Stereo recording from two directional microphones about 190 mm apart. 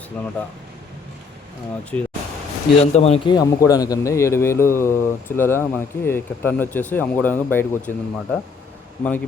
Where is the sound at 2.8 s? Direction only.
35° left (ahead or behind); by 7.9 s 10° left (ahead or behind).